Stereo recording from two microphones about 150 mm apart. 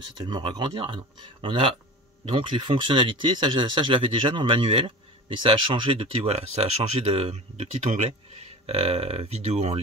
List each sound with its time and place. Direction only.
0.2 s speech: 30° right (ahead or behind); by 9.8 s 45° right (ahead or behind)